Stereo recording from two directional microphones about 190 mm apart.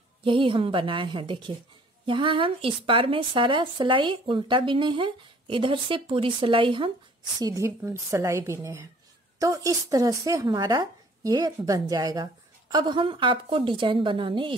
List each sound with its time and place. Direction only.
0.2 s a woman's voice: 25° right (ahead or behind)